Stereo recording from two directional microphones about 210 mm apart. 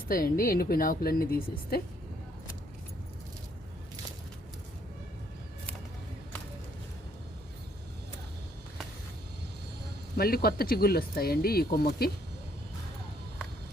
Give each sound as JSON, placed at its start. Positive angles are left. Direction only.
{"t": 0.1, "sound": "speech", "side_deg": 45}
{"t": 10.2, "sound": "speech", "side_deg": 45}